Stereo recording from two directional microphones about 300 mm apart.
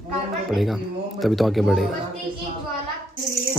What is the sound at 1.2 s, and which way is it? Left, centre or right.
Speech, centre.